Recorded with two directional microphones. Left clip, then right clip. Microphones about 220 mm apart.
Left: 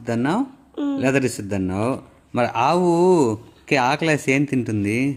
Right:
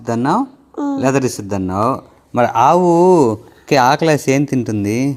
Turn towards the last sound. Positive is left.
turn(degrees=-15)  # may be behind; listen again after turning